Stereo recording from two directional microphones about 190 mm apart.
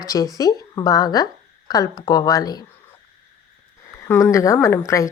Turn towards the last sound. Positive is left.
turn(degrees=15)  # may be behind; listen again after turning